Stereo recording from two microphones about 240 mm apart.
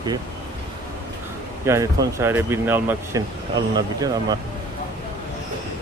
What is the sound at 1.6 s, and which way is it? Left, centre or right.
Speech, centre.